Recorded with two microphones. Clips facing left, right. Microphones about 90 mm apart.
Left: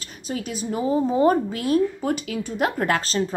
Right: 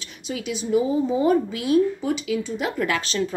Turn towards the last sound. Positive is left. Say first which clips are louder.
# left 2 dB
turn(degrees=35)  # may be behind; listen again after turning